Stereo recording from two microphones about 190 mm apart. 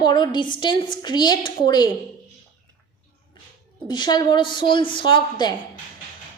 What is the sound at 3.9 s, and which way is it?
A woman's voice, 25° left (ahead or behind).